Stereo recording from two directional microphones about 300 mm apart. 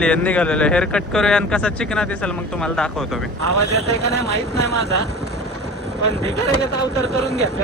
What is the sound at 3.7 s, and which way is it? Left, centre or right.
Speech, left.